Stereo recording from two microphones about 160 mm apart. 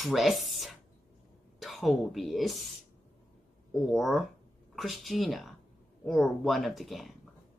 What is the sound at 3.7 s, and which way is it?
Speech, centre (ahead or behind).